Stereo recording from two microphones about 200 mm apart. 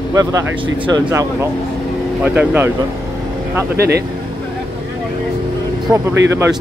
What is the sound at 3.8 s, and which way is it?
Speech, 55° right (ahead or behind).